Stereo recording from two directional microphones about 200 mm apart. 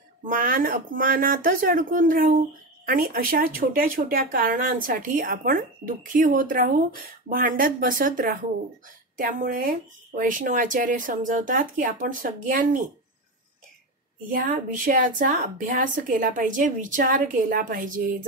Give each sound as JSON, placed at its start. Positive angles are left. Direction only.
{"t": 0.3, "sound": "speech", "side_deg": -45}
{"t": 14.3, "sound": "speech", "side_deg": -45}